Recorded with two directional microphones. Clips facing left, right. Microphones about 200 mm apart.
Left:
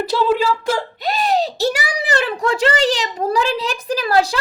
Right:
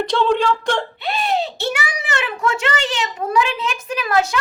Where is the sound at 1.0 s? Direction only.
40° left (ahead or behind).